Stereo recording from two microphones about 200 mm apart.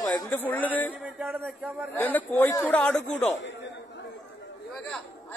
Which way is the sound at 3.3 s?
65° left (ahead or behind).